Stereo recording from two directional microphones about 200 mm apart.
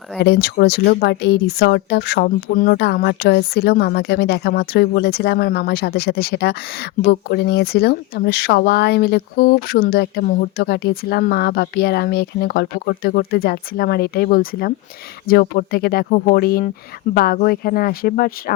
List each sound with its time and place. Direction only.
0.2 s speech: 55° left (ahead or behind)